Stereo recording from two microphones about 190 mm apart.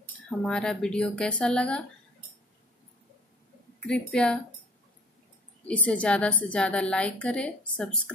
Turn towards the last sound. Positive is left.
turn(degrees=5)  # may be behind; listen again after turning